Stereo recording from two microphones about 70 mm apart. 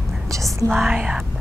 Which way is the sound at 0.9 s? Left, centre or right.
Centre.